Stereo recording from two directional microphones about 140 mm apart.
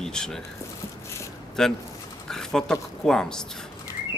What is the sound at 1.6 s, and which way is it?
A man's voice, 5° left (ahead or behind).